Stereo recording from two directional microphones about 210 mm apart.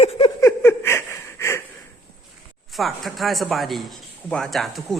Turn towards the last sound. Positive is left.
turn(degrees=0)  # may be behind; listen again after turning